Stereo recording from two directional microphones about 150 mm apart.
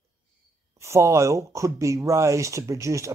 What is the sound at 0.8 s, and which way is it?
Speech, 20° right (ahead or behind).